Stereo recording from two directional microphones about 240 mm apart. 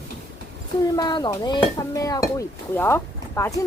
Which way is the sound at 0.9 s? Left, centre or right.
Centre.